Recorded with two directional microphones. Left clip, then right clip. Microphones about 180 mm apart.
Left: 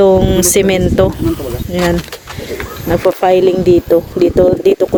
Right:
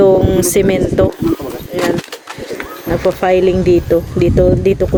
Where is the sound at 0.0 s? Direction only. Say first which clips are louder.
Left 1 dB; 25° right (ahead or behind).